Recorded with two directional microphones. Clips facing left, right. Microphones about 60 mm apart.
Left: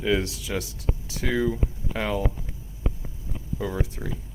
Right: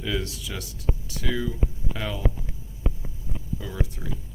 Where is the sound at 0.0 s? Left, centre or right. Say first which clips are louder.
Left 5 dB; left.